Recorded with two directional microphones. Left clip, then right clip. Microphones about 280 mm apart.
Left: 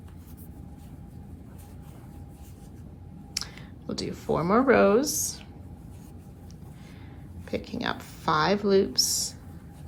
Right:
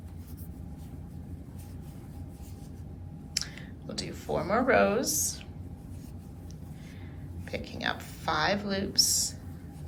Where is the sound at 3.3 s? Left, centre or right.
Centre.